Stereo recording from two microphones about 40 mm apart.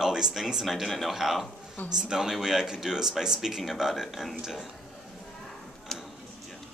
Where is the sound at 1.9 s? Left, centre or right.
Centre.